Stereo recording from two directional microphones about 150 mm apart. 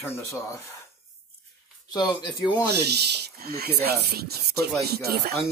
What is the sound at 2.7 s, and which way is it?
Speech, 90° right.